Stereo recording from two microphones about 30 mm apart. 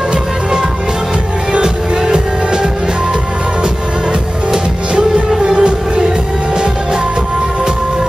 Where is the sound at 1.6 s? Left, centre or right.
Right.